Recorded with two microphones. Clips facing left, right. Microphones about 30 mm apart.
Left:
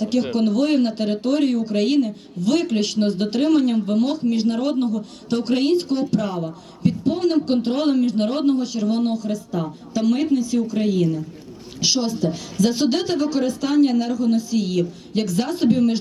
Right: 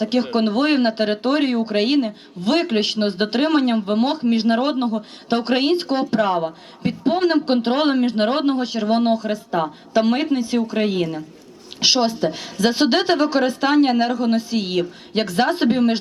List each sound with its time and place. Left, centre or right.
0.0 s speech: right